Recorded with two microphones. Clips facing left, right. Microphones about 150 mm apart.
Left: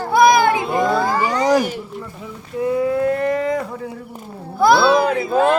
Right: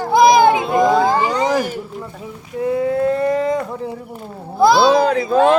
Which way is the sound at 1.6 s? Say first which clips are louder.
Even; 45° right (ahead or behind).